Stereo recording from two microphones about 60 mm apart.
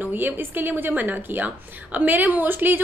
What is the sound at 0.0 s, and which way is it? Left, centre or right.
A woman's voice, right.